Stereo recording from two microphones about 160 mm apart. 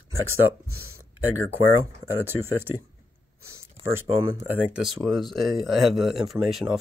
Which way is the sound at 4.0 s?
10° right (ahead or behind).